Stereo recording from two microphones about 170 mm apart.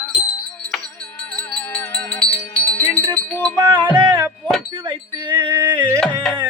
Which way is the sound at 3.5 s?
25° right (ahead or behind).